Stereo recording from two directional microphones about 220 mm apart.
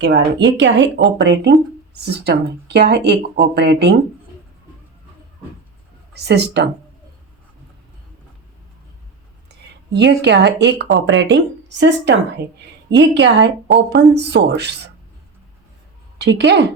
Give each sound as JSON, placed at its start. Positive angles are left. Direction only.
{"t": 0.3, "sound": "speech", "side_deg": -55}
{"t": 6.1, "sound": "speech", "side_deg": -50}
{"t": 9.9, "sound": "a woman's voice", "side_deg": -50}
{"t": 16.1, "sound": "speech", "side_deg": -50}